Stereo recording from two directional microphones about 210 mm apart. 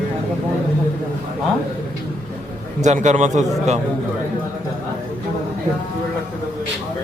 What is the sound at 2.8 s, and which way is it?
Speech, 35° right (ahead or behind).